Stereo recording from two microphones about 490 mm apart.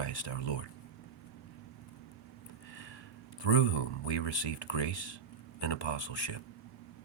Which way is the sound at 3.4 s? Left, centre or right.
Left.